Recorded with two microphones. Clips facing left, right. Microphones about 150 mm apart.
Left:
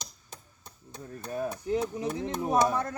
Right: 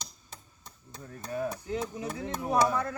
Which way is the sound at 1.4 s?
20° left (ahead or behind).